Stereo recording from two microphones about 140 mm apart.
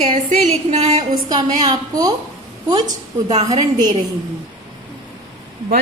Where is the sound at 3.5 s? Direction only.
30° right (ahead or behind).